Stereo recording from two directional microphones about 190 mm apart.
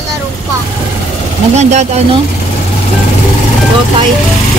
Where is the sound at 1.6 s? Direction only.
35° right (ahead or behind).